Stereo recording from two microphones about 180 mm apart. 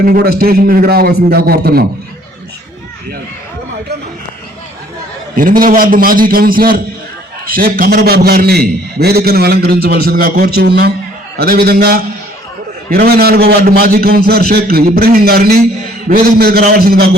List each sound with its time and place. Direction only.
0.0 s a man's voice: 55° right (ahead or behind)
5.4 s a man's voice: 50° right (ahead or behind)